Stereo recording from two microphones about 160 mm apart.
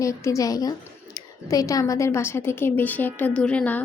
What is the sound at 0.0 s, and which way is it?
A woman's voice, 20° left (ahead or behind).